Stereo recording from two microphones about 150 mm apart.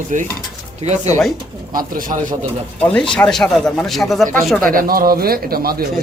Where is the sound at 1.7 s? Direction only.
70° right (ahead or behind).